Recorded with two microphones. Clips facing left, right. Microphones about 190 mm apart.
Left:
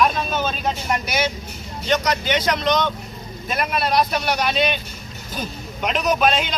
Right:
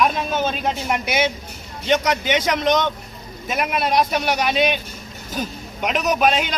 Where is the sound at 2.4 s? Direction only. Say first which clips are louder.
Right 1 dB; 20° right (ahead or behind).